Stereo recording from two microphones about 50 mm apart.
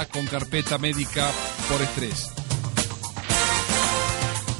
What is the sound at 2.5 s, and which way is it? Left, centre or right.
Music, centre.